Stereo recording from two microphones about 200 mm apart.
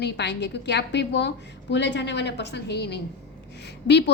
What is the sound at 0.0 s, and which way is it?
A woman's voice, 60° left (ahead or behind).